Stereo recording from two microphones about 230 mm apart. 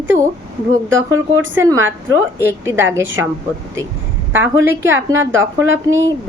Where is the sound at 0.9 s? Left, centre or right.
Right.